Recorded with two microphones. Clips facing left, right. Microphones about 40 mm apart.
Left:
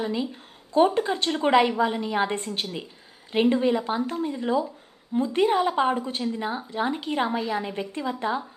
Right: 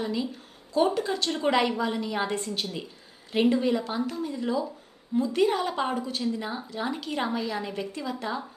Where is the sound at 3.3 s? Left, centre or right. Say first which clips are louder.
Left 2 dB; left.